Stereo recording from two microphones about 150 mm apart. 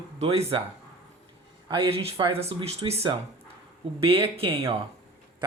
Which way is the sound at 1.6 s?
35° right (ahead or behind).